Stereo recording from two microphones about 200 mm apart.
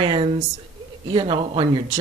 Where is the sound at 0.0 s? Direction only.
25° right (ahead or behind).